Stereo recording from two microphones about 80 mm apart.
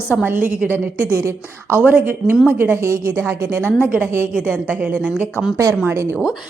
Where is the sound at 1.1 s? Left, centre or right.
Right.